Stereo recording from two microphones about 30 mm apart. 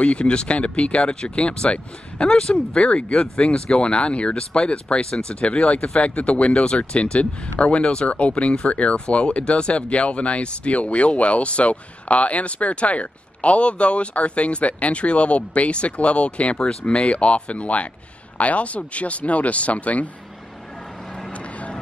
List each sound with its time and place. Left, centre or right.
0.0 s speech: left
7.8 s speech: left
8.1 s speech: left
16.6 s speech: left